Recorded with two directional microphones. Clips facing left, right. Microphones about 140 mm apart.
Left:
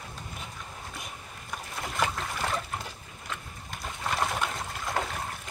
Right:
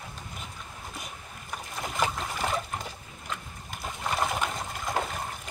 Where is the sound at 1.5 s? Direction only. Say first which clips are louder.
Right 1 dB; 5° right (ahead or behind).